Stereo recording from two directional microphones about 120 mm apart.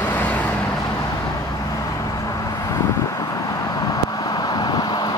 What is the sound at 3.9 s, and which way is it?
Vehicle, 30° left (ahead or behind).